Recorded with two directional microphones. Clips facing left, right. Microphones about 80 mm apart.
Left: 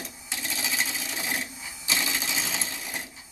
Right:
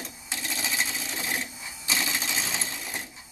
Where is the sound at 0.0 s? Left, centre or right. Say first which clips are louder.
Even; centre.